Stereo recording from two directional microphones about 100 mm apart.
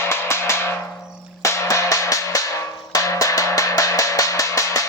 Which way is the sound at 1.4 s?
30° left (ahead or behind).